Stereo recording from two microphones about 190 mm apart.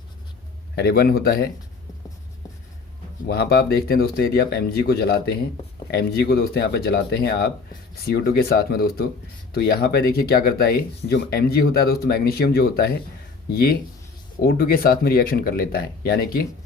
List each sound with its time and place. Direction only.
0.8 s speech: 55° left (ahead or behind)
3.2 s speech: 55° left (ahead or behind)